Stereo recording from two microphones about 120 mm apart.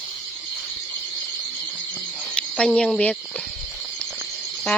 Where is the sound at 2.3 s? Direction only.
5° left (ahead or behind).